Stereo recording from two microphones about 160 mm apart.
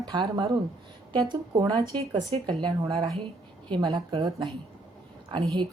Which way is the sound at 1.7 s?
40° right (ahead or behind).